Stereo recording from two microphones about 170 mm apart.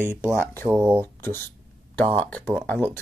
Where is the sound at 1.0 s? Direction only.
10° left (ahead or behind).